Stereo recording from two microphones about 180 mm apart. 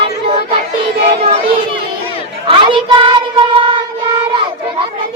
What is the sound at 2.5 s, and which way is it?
Child singing, 30° right (ahead or behind).